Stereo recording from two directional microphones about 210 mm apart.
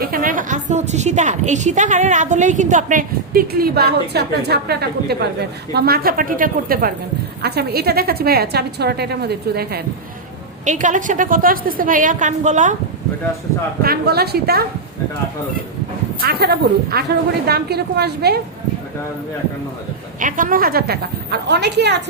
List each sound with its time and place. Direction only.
0.0 s a woman's voice: 40° right (ahead or behind)
10.7 s a woman's voice: 35° right (ahead or behind)
13.8 s a woman's voice: 45° right (ahead or behind)
16.2 s a woman's voice: 50° right (ahead or behind)
20.1 s a woman's voice: 40° right (ahead or behind)